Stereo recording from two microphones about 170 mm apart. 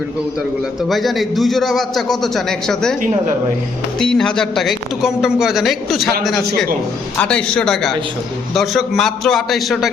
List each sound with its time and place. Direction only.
0.9 s speech: centre (ahead or behind)
3.9 s speech: 5° left (ahead or behind)